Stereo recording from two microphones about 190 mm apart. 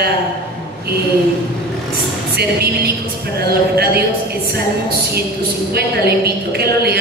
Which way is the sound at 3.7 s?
55° right (ahead or behind).